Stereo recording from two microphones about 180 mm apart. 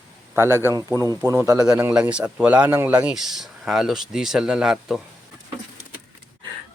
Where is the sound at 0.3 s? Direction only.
15° right (ahead or behind).